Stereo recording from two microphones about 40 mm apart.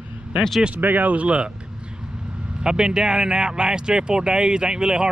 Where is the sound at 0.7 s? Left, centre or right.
Right.